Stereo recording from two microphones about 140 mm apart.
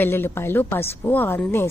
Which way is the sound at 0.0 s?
15° left (ahead or behind).